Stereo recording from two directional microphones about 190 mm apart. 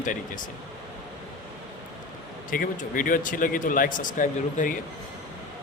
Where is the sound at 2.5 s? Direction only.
45° left (ahead or behind).